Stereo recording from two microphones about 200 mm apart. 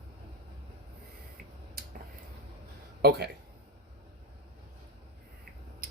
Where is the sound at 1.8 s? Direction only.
50° right (ahead or behind).